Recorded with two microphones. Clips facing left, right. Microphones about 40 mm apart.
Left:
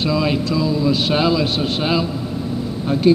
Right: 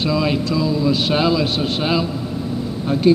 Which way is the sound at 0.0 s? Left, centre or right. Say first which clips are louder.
Even; centre.